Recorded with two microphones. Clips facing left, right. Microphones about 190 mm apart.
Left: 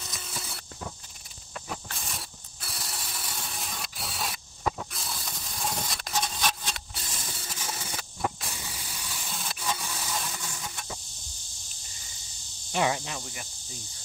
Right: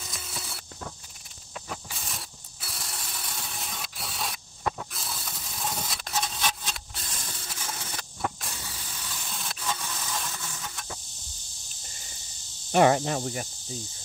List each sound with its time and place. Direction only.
0.0 s a sound: centre (ahead or behind)
1.5 s mechanisms: 5° right (ahead or behind)
12.7 s speech: 50° right (ahead or behind)